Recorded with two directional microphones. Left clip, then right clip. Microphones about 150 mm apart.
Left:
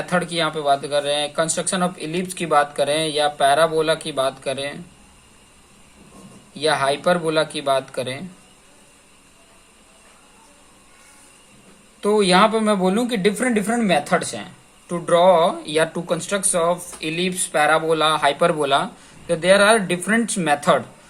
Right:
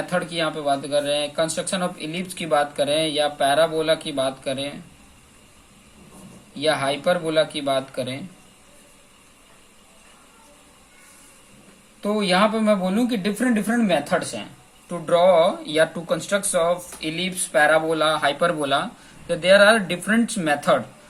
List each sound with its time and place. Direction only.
0.0 s speech: 60° left (ahead or behind)
6.5 s speech: 55° left (ahead or behind)
11.9 s speech: 60° left (ahead or behind)
14.8 s speech: 45° left (ahead or behind)